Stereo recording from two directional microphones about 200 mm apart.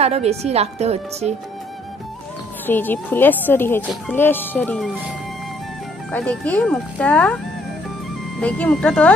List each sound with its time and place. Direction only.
0.0 s speech: 30° right (ahead or behind)
2.6 s a woman's voice: 10° left (ahead or behind)
6.1 s a woman's voice: 10° left (ahead or behind)
8.4 s a woman's voice: 5° left (ahead or behind)